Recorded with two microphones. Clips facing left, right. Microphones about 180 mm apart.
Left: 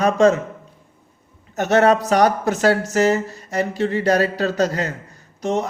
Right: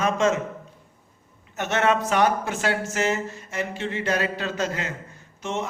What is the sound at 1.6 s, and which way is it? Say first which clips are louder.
Speech: left 7 dB; 40° left (ahead or behind).